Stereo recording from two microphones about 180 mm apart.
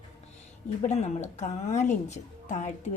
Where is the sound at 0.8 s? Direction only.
40° left (ahead or behind).